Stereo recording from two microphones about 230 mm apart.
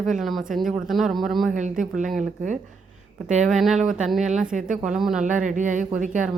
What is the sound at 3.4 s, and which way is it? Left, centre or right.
Speech, centre.